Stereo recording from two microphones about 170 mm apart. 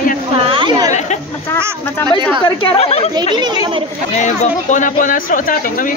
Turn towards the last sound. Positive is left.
turn(degrees=50)  # may be behind; listen again after turning